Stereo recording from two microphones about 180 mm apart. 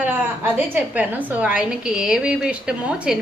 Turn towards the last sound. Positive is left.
turn(degrees=-5)  # may be behind; listen again after turning